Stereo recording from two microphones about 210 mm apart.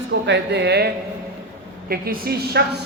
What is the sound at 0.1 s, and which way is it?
Speech, 55° right (ahead or behind).